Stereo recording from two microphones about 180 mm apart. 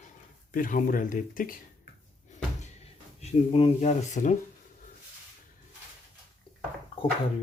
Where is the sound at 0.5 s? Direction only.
50° left (ahead or behind).